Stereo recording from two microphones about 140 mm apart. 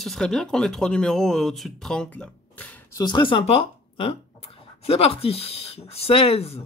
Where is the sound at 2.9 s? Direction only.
35° left (ahead or behind).